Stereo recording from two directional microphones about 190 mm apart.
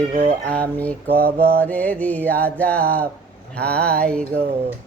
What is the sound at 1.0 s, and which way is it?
Mantra, 55° right (ahead or behind).